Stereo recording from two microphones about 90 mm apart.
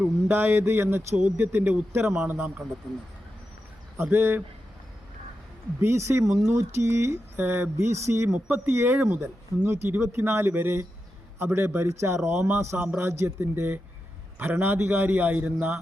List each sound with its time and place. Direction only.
0.3 s speech: 25° right (ahead or behind)
4.1 s speech: 25° right (ahead or behind)
5.8 s speech: 30° right (ahead or behind)
6.2 s speech: 5° right (ahead or behind)
6.6 s speech: 30° right (ahead or behind); by 15.8 s 15° right (ahead or behind)